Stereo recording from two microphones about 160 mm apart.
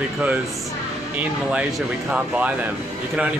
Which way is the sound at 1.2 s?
5° right (ahead or behind).